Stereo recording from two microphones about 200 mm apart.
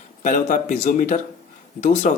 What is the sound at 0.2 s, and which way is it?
A man's voice, 40° left (ahead or behind).